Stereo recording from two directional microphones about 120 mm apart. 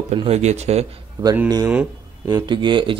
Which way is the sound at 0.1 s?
60° right (ahead or behind).